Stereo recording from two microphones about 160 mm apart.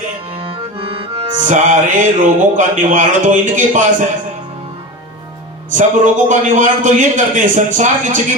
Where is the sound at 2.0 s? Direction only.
50° right (ahead or behind).